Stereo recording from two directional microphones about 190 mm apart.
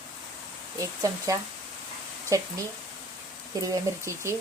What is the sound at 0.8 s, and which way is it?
Speech, 15° right (ahead or behind).